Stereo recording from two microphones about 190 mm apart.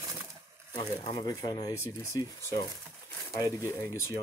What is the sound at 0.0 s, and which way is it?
Crumpling, 15° right (ahead or behind).